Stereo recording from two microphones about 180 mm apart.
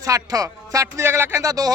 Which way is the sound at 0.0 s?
20° right (ahead or behind).